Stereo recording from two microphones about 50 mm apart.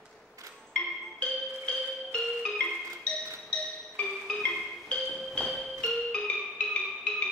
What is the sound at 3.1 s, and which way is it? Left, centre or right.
Music, centre.